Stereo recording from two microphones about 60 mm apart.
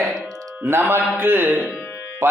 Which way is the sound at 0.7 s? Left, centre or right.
Right.